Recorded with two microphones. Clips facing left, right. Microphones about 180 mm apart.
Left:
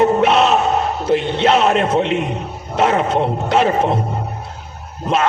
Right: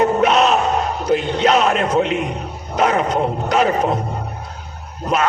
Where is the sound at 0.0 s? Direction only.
30° left (ahead or behind).